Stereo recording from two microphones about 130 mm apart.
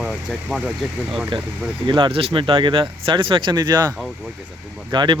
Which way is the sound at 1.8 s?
40° right (ahead or behind).